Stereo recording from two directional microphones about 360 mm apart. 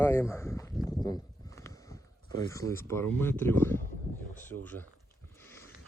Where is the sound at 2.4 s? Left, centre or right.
Centre.